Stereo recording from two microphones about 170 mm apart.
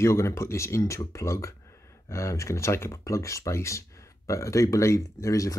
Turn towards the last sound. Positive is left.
turn(degrees=20)  # may be behind; listen again after turning